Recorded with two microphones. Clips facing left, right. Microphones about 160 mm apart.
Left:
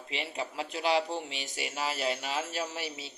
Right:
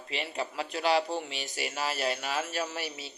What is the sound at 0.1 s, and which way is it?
Speech, 25° left (ahead or behind).